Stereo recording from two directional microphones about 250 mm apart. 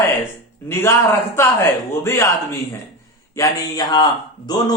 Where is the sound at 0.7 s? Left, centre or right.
Centre.